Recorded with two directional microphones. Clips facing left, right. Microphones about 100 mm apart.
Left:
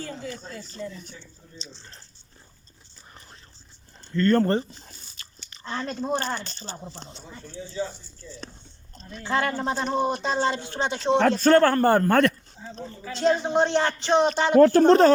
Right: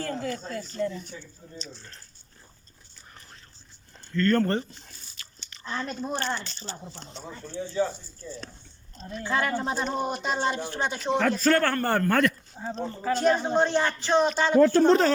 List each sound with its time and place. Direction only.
0.0 s a sound: 55° right (ahead or behind)
1.7 s speech: 25° left (ahead or behind)
4.1 s speech: 25° left (ahead or behind)
6.1 s speech: 45° left (ahead or behind)
6.9 s speech: 25° left (ahead or behind)
8.2 s speech: 35° right (ahead or behind)
9.2 s speech: 25° left (ahead or behind)
12.5 s speech: 60° right (ahead or behind)
13.2 s speech: 20° left (ahead or behind)
14.5 s speech: 55° left (ahead or behind)